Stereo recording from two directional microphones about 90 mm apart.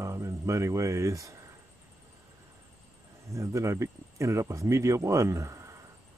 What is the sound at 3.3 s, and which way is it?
Speech, 35° right (ahead or behind).